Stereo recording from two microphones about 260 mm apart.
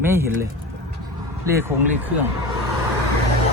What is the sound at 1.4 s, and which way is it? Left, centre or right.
Speech, centre.